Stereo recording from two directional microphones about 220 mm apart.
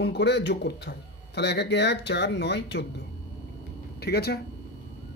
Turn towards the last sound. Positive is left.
turn(degrees=45)  # may be behind; listen again after turning